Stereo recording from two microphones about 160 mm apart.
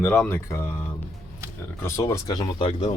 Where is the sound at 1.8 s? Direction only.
15° left (ahead or behind).